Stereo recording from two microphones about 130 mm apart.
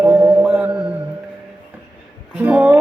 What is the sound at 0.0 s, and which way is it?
Mantra, 20° right (ahead or behind).